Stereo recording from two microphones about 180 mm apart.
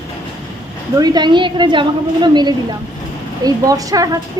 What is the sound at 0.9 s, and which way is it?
A woman's voice, 20° right (ahead or behind).